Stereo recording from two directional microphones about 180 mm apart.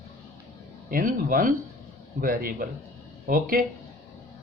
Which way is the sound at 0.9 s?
50° right (ahead or behind).